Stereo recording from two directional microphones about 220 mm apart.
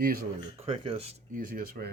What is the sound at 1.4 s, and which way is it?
Speech, 40° right (ahead or behind).